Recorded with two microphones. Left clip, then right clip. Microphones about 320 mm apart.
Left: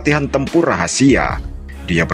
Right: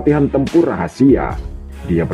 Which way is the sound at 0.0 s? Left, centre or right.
Left.